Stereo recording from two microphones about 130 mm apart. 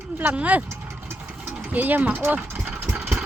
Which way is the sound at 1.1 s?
15° right (ahead or behind).